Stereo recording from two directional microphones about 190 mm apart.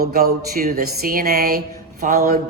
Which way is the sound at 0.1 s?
50° right (ahead or behind).